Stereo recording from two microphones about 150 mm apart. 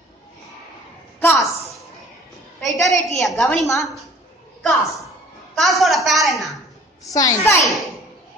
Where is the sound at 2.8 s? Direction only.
Centre (ahead or behind).